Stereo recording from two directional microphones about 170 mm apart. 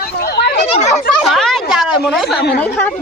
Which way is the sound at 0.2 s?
80° left.